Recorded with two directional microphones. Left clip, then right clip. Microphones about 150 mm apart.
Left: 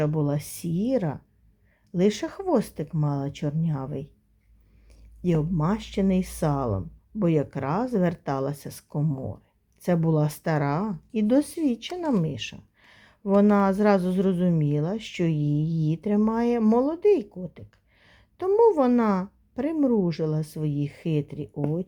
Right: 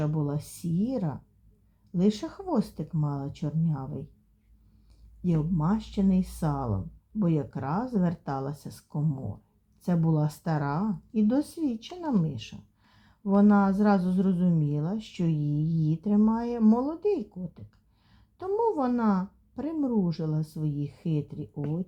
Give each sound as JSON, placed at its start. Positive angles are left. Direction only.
{"t": 0.0, "sound": "speech", "side_deg": 25}
{"t": 5.2, "sound": "speech", "side_deg": 25}